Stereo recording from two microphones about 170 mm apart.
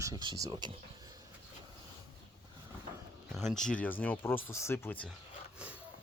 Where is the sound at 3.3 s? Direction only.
Centre (ahead or behind).